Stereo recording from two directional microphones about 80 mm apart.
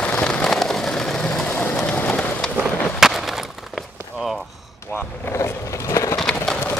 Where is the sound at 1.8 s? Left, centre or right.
Centre.